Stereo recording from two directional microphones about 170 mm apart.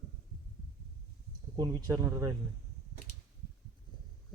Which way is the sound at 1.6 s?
20° right (ahead or behind).